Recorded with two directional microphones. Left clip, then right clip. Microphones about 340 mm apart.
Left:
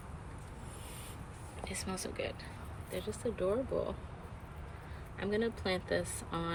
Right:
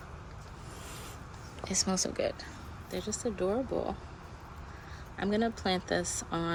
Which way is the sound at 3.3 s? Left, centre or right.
Centre.